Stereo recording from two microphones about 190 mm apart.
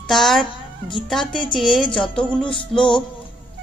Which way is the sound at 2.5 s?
25° left (ahead or behind).